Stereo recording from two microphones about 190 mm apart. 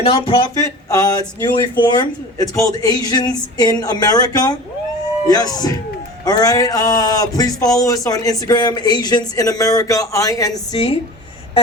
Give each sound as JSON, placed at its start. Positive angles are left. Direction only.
{"t": 0.1, "sound": "speech", "side_deg": 25}